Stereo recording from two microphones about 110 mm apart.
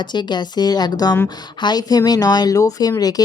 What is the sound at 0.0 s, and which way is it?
Speech, 40° left (ahead or behind).